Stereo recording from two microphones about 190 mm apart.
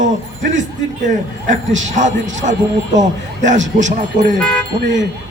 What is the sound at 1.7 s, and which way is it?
Speech, 80° right.